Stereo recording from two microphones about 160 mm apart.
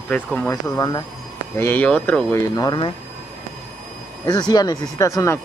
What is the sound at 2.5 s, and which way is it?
Speech, 25° left (ahead or behind).